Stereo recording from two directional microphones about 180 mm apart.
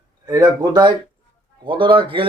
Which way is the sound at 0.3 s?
20° right (ahead or behind).